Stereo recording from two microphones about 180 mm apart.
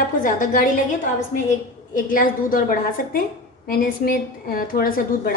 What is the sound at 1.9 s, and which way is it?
A woman's voice, 50° left (ahead or behind).